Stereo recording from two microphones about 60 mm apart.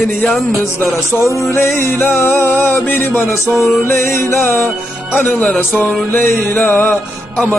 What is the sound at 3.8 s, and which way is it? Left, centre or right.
Music, left.